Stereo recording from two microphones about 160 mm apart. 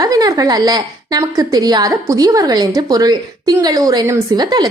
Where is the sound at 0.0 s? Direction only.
25° right (ahead or behind).